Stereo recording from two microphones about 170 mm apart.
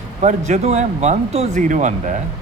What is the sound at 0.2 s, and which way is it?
Speech, 45° right (ahead or behind).